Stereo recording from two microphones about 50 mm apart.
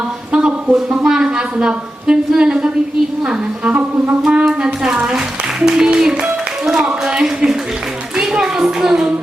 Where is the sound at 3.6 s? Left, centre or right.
Right.